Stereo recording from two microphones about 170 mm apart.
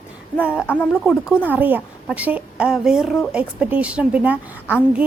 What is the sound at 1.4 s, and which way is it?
A woman's voice, 10° right (ahead or behind).